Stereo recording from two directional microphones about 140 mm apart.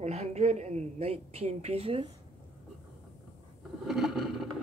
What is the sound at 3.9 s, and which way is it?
Vehicle, centre (ahead or behind).